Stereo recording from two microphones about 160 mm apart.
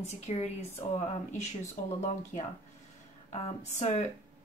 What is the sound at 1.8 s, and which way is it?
Speech, 60° left (ahead or behind).